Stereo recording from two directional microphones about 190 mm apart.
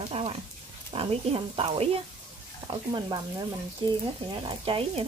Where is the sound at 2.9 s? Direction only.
20° right (ahead or behind).